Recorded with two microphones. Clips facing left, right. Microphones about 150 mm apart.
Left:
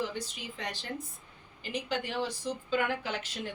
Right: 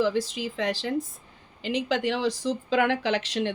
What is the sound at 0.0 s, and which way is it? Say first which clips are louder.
Speech: right 11 dB; 90° right.